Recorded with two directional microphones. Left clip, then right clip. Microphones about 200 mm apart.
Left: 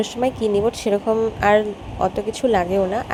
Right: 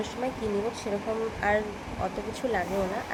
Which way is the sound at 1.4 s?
45° left (ahead or behind).